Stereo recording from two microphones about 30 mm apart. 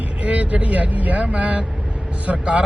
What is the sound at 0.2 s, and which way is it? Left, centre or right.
Speech, right.